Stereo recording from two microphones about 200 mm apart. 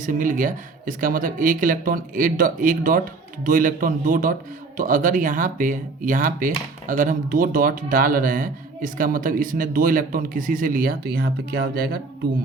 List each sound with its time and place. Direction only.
0.0 s speech: 40° right (ahead or behind)